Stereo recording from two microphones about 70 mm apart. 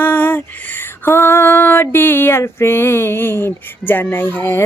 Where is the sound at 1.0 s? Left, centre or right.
Left.